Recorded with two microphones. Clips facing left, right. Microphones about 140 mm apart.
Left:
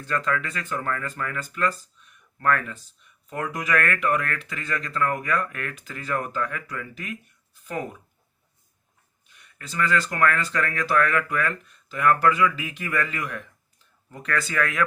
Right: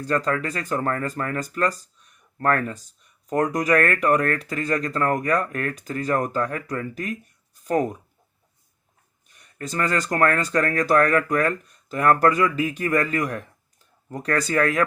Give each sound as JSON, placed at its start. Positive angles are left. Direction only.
{"t": 0.0, "sound": "speech", "side_deg": -35}
{"t": 9.3, "sound": "speech", "side_deg": -40}